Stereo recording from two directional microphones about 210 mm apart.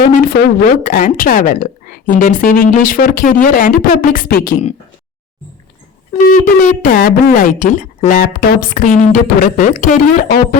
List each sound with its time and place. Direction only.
0.0 s a woman's voice: 40° left (ahead or behind)
6.2 s a woman's voice: 40° left (ahead or behind)